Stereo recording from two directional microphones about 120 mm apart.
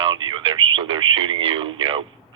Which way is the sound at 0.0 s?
45° right (ahead or behind).